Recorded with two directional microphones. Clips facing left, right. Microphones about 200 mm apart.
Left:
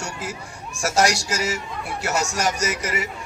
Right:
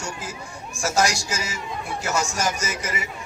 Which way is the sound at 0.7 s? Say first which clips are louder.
Left 2 dB; 75° left (ahead or behind).